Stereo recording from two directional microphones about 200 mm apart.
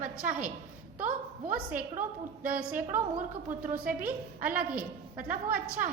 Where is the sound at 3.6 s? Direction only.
45° right (ahead or behind).